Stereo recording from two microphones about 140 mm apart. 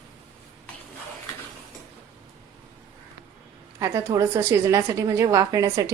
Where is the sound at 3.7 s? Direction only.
25° right (ahead or behind).